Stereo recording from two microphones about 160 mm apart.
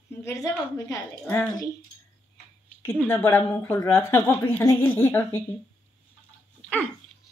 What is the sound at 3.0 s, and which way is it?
A woman's voice, 15° left (ahead or behind).